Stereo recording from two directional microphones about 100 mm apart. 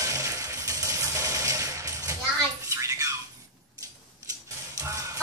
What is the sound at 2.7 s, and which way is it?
Squawk, 35° right (ahead or behind).